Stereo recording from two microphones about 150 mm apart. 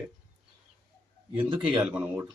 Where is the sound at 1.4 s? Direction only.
35° right (ahead or behind).